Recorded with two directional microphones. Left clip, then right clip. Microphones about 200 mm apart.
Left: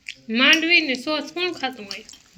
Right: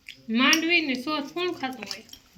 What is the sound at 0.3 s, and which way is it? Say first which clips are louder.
Speech: left 5 dB; centre (ahead or behind).